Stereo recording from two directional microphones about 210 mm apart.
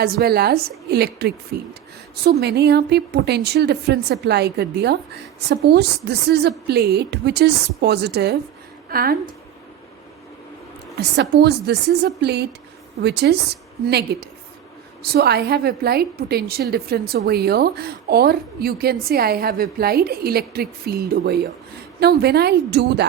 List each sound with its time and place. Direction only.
0.0 s a woman's voice: 45° right (ahead or behind)
2.4 s a woman's voice: 50° right (ahead or behind)
10.9 s a woman's voice: 50° right (ahead or behind)